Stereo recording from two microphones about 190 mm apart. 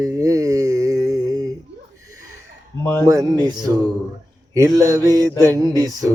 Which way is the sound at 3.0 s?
20° right (ahead or behind).